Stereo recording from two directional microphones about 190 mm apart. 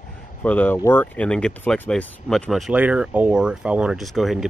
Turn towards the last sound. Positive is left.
turn(degrees=0)  # may be behind; listen again after turning